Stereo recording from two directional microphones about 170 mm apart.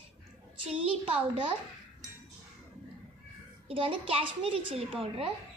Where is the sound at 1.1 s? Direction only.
30° right (ahead or behind).